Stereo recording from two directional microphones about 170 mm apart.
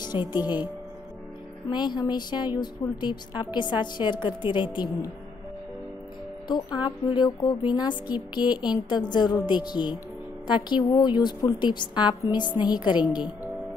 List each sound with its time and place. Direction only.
0.0 s speech: 25° left (ahead or behind)
1.7 s a woman's voice: 25° left (ahead or behind)
6.4 s a woman's voice: 25° left (ahead or behind)